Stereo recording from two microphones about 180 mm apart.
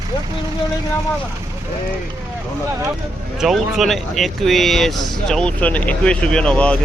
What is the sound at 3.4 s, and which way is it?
Speech, centre (ahead or behind).